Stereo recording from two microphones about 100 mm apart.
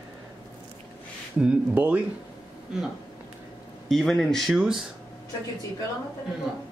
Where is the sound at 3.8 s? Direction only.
Centre (ahead or behind).